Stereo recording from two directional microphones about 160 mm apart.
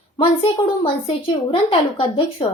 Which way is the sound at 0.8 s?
35° left (ahead or behind).